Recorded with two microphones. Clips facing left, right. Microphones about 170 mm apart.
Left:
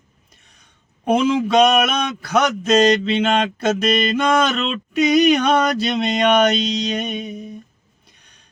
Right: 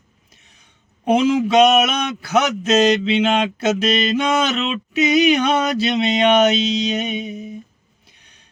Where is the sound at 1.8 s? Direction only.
55° left (ahead or behind).